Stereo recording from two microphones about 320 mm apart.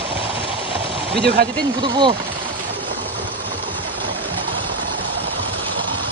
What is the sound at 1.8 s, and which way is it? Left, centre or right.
Speech, centre.